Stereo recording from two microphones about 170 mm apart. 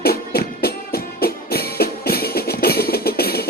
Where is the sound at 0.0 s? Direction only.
65° left (ahead or behind).